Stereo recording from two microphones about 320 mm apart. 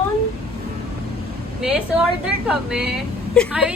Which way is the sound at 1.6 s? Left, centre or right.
Centre.